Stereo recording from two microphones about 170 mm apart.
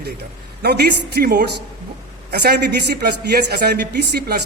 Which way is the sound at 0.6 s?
70° right (ahead or behind).